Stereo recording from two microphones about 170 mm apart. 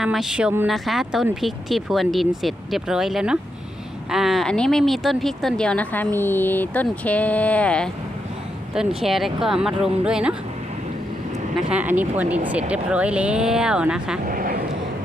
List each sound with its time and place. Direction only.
0.0 s speech: centre (ahead or behind)
9.0 s speech: centre (ahead or behind)
11.7 s speech: 10° right (ahead or behind)
14.3 s vehicle: 55° right (ahead or behind)